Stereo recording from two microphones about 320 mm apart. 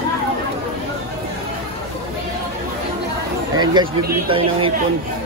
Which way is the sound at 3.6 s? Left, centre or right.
Centre.